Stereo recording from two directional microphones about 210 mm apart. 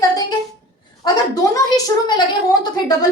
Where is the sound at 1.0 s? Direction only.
20° left (ahead or behind).